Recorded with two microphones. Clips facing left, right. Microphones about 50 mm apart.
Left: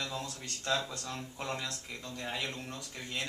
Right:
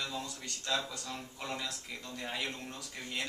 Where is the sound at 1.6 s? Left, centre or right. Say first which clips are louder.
Left 1 dB; centre.